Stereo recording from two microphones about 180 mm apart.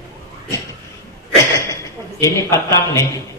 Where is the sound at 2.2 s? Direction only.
15° left (ahead or behind).